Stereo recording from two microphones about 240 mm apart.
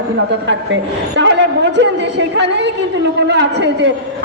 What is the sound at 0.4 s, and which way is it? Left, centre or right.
A woman's voice, right.